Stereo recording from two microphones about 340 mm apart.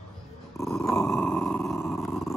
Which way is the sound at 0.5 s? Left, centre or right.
Centre.